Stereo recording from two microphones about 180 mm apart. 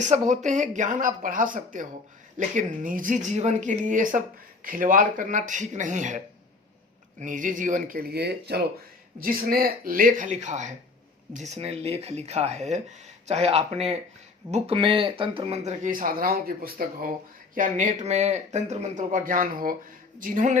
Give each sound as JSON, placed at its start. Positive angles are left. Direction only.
{"t": 0.0, "sound": "speech", "side_deg": -40}